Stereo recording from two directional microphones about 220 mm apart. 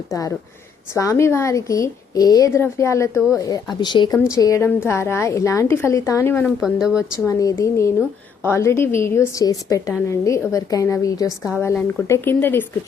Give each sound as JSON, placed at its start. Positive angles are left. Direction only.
{"t": 0.1, "sound": "a woman's voice", "side_deg": 15}
{"t": 6.6, "sound": "speech", "side_deg": 0}
{"t": 7.3, "sound": "a woman's voice", "side_deg": 15}
{"t": 11.3, "sound": "speech", "side_deg": -5}
{"t": 11.6, "sound": "a woman's voice", "side_deg": 10}